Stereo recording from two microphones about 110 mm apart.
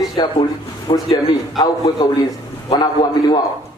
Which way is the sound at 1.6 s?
35° left (ahead or behind).